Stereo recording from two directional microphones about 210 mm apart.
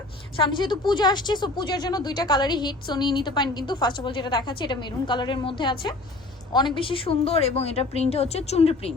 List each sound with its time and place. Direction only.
0.3 s speech: 20° left (ahead or behind)